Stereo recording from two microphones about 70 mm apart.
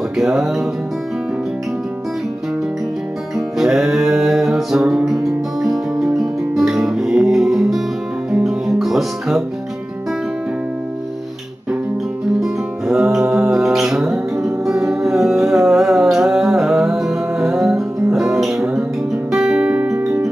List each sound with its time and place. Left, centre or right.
0.2 s music: centre
3.3 s music: centre
12.4 s music: centre
19.3 s guitar: centre
19.9 s music: right